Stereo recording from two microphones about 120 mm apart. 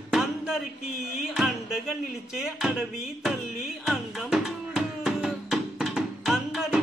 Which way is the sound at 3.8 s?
Centre (ahead or behind).